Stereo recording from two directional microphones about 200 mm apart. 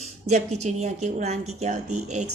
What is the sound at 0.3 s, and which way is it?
Speech, 35° right (ahead or behind).